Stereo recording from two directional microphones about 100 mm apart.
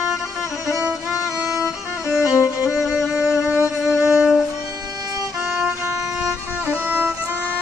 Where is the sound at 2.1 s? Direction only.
5° right (ahead or behind).